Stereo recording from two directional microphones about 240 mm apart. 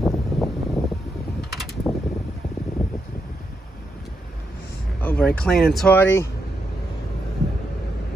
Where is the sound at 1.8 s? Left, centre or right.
Centre.